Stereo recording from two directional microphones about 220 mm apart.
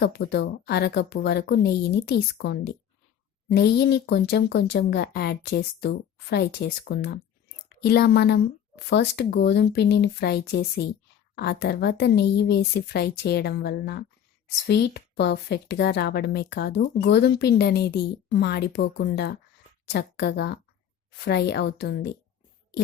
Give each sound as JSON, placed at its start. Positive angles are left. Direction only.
{"t": 0.0, "sound": "speech", "side_deg": 45}